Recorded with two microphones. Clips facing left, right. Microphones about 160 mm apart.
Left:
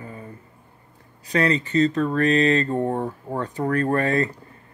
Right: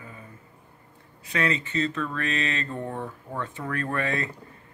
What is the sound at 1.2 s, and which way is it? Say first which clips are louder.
Speech: left 6 dB; 35° left (ahead or behind).